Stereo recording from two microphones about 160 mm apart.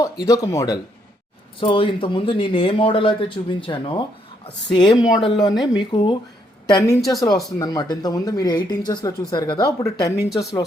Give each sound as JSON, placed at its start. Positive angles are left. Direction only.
{"t": 0.0, "sound": "speech", "side_deg": 20}